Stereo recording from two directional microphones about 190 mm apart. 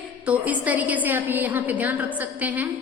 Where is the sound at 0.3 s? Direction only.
10° right (ahead or behind).